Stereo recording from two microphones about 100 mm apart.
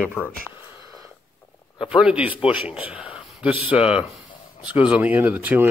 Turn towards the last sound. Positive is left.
turn(degrees=-15)  # may be behind; listen again after turning